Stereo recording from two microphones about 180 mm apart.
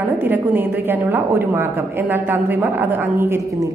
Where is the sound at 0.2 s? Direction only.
10° right (ahead or behind).